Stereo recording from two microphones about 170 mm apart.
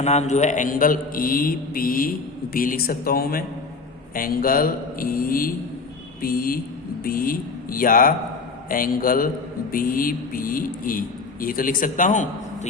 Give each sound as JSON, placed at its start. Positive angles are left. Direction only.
{"t": 0.0, "sound": "a man's voice", "side_deg": 40}